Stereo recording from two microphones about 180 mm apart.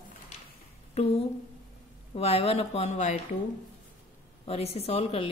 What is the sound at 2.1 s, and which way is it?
A woman's voice, 35° left (ahead or behind).